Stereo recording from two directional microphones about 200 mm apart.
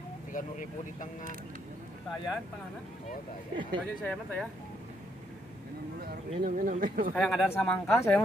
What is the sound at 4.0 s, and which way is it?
Speech, 5° left (ahead or behind).